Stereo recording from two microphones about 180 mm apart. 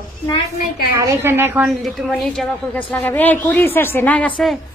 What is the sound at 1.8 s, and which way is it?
A woman's voice, centre (ahead or behind).